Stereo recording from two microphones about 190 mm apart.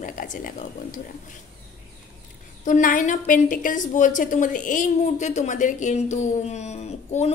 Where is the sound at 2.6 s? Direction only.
45° left (ahead or behind).